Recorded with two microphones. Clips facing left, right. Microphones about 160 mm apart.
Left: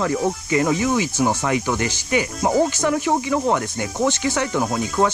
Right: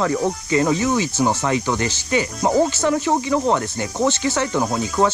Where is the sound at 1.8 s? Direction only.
15° left (ahead or behind).